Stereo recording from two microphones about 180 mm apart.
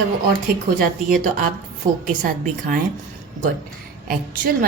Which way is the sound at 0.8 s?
50° right (ahead or behind).